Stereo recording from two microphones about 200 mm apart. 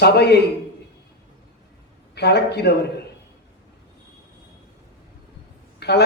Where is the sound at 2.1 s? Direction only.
55° left (ahead or behind).